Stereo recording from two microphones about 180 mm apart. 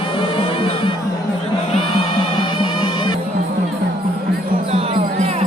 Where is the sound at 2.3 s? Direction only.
25° left (ahead or behind).